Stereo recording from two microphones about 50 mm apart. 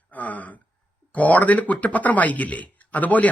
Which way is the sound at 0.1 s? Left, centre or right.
Left.